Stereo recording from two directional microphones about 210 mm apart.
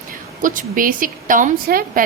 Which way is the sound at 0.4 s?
40° right (ahead or behind).